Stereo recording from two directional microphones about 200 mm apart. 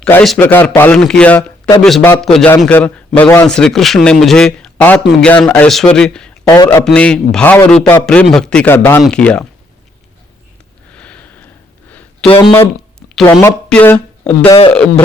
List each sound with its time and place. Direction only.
0.0 s a man's voice: 5° left (ahead or behind)
6.5 s a man's voice: 15° left (ahead or behind)
6.8 s a man's voice: 5° left (ahead or behind)
10.9 s a sound: 5° left (ahead or behind)
12.2 s speech: 25° left (ahead or behind)
12.5 s a sound: 5° left (ahead or behind)
13.4 s speech: 10° left (ahead or behind)
14.4 s speech: 25° left (ahead or behind)
14.7 s a man's voice: 5° left (ahead or behind)